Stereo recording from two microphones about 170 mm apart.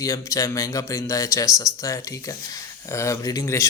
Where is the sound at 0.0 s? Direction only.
20° left (ahead or behind).